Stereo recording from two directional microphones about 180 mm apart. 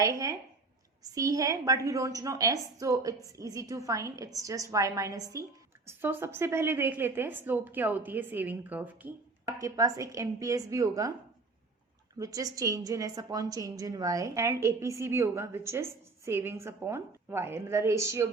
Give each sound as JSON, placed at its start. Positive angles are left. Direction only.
{"t": 0.0, "sound": "a woman's voice", "side_deg": -20}
{"t": 12.2, "sound": "a woman's voice", "side_deg": -20}